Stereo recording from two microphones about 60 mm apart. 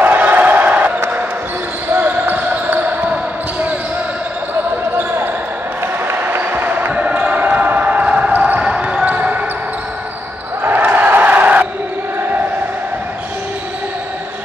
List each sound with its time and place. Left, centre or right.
0.0 s crowd: right
1.9 s basketball bounce: right
4.9 s basketball bounce: right
8.7 s a sound: centre
10.6 s crowd: right